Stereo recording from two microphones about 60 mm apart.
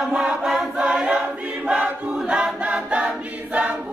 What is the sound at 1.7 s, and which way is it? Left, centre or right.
Choir, centre.